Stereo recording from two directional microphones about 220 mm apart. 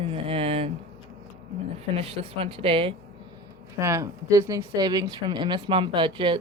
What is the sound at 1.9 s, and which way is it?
Speech, 25° right (ahead or behind).